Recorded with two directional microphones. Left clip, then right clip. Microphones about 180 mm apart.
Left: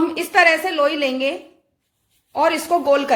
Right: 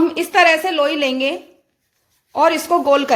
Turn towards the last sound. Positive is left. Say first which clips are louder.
# right 2 dB
turn(degrees=-20)  # may be behind; listen again after turning